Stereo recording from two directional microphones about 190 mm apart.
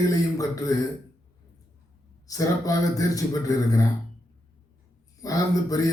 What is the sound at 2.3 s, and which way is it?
Speech, 20° left (ahead or behind).